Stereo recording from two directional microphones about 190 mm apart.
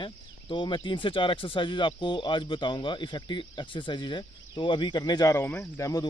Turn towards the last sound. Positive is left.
turn(degrees=15)  # may be behind; listen again after turning